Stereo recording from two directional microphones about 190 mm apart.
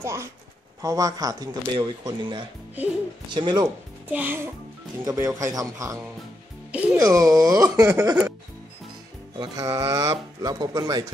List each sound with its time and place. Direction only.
0.0 s speech: 15° right (ahead or behind)
4.1 s speech: 10° right (ahead or behind)
7.0 s speech: 15° right (ahead or behind)
9.4 s speech: 15° right (ahead or behind)